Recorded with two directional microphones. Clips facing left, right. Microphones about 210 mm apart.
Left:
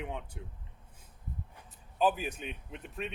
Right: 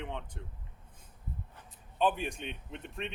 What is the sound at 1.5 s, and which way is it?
A man's voice, 10° left (ahead or behind).